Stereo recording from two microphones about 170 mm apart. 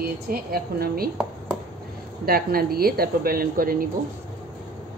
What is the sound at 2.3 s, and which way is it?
Speech, 60° right (ahead or behind).